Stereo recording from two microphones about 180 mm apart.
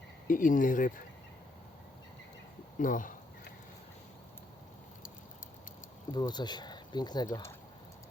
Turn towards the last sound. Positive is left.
turn(degrees=25)  # may be behind; listen again after turning